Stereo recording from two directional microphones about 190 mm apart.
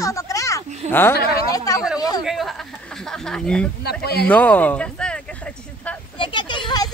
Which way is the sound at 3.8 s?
55° left (ahead or behind).